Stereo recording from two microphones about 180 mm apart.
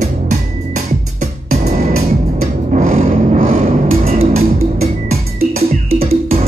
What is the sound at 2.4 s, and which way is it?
Music, 50° right (ahead or behind).